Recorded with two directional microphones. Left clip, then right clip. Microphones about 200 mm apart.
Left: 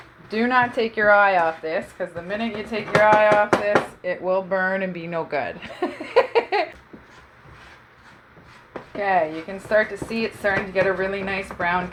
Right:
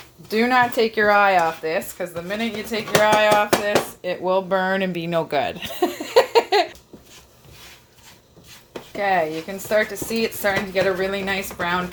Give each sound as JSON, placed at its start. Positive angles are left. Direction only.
{"t": 0.3, "sound": "speech", "side_deg": -55}
{"t": 5.0, "sound": "giggle", "side_deg": -55}
{"t": 9.0, "sound": "speech", "side_deg": -50}